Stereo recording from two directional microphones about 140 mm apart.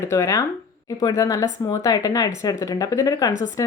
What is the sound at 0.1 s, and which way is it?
Speech, 20° left (ahead or behind).